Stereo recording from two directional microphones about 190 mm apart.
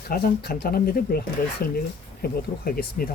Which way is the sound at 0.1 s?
50° left (ahead or behind).